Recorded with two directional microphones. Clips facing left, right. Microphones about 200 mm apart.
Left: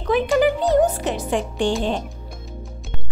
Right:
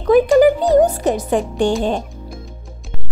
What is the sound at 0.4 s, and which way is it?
Music, 40° right (ahead or behind).